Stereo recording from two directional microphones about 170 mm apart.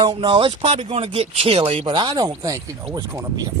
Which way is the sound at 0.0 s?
30° right (ahead or behind).